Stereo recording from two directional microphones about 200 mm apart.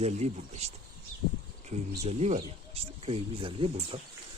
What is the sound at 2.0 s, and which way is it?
Speech, 30° right (ahead or behind).